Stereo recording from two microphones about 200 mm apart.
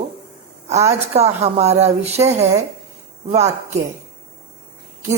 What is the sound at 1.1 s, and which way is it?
Speech, 30° right (ahead or behind).